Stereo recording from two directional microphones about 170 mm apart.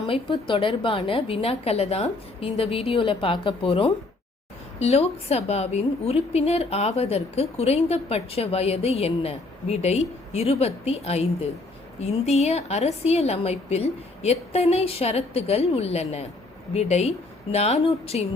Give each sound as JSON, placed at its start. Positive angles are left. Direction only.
{"t": 0.1, "sound": "a woman's voice", "side_deg": 30}